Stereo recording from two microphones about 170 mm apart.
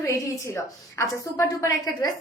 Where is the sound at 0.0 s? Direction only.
20° left (ahead or behind).